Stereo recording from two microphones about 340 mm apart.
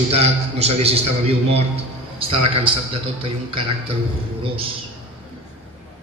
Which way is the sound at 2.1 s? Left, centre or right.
Centre.